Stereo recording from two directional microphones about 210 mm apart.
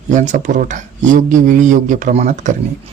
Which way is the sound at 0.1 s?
35° right (ahead or behind).